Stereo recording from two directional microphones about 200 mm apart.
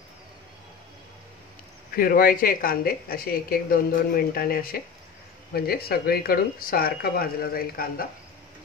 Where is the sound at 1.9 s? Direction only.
45° left (ahead or behind).